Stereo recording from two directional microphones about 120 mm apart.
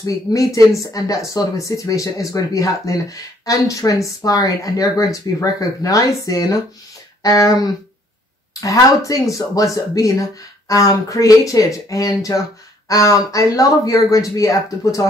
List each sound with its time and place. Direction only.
0.0 s speech: 30° left (ahead or behind)